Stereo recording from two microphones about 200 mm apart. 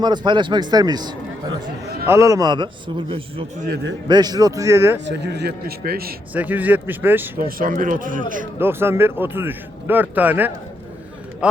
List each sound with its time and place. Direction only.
0.0 s a man's voice: 20° right (ahead or behind)
5.0 s a man's voice: 60° right (ahead or behind)
6.3 s speech: 10° right (ahead or behind)
7.3 s a man's voice: 45° right (ahead or behind)
8.5 s speech: 10° right (ahead or behind)